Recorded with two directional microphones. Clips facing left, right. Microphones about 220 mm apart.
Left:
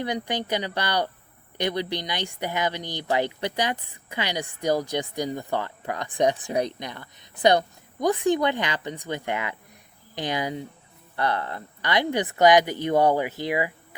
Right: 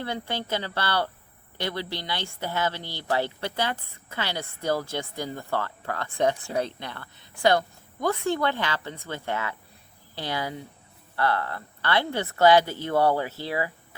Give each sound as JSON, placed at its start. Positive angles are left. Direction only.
{"t": 0.0, "sound": "speech", "side_deg": 15}